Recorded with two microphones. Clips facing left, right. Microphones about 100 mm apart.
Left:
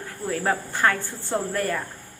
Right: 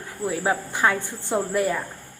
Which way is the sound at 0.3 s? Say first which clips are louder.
Right 1 dB; 10° right (ahead or behind).